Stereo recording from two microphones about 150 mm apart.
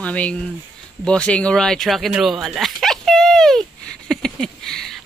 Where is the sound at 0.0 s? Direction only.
10° left (ahead or behind).